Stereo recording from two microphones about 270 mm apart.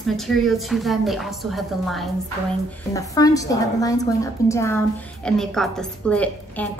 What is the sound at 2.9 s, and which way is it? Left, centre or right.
A woman's voice, centre.